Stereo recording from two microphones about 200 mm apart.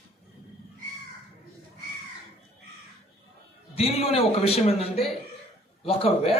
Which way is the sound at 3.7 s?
30° left (ahead or behind).